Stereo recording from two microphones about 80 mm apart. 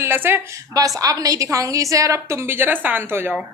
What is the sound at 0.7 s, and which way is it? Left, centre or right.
A woman's voice, right.